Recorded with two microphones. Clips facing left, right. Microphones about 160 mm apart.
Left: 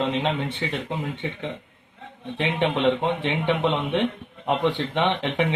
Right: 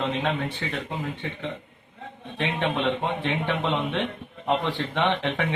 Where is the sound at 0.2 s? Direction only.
20° left (ahead or behind).